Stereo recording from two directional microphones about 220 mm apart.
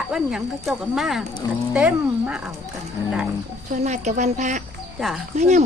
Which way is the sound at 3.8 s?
30° right (ahead or behind).